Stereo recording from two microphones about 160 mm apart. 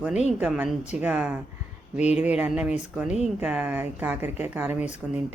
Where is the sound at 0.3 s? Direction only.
10° right (ahead or behind).